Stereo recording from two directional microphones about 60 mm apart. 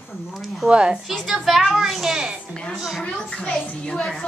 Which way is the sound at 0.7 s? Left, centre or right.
Centre.